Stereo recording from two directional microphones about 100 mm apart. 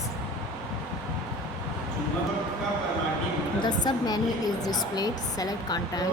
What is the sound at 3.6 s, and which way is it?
A woman's voice, 45° left (ahead or behind).